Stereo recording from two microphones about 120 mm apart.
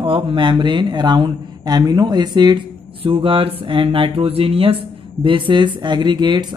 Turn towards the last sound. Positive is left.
turn(degrees=-40)  # may be behind; listen again after turning